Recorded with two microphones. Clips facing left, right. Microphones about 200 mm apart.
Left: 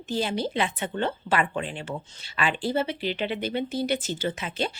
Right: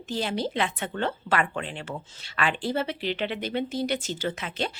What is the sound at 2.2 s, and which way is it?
A woman's voice, centre (ahead or behind).